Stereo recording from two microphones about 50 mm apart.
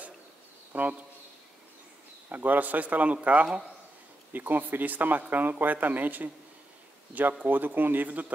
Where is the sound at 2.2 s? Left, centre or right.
Right.